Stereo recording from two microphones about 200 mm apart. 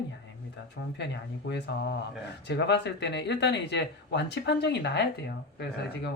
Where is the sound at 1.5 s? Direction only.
60° left (ahead or behind).